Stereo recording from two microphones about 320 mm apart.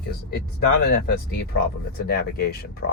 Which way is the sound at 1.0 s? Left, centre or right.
Left.